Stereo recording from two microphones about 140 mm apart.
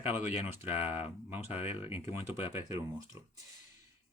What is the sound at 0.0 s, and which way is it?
Speech, 15° right (ahead or behind).